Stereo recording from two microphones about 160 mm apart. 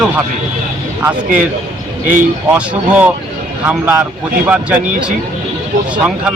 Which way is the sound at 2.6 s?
10° right (ahead or behind).